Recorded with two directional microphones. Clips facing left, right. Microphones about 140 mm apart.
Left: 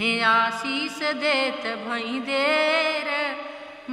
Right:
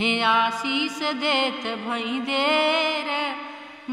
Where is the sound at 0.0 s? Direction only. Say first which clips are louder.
Right 2 dB; 15° right (ahead or behind).